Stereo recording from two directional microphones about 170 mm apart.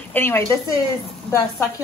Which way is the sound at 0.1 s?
15° left (ahead or behind).